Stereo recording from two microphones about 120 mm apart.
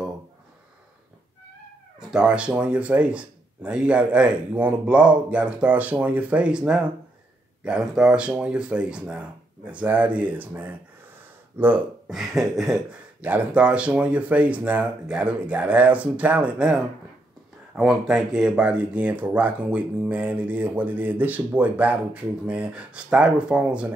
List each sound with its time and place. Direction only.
2.0 s speech: 5° right (ahead or behind)
12.1 s speech: centre (ahead or behind)